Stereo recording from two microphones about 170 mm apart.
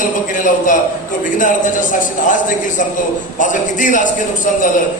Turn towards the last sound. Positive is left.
turn(degrees=50)  # may be behind; listen again after turning